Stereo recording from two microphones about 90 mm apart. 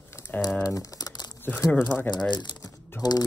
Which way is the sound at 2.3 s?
55° left (ahead or behind).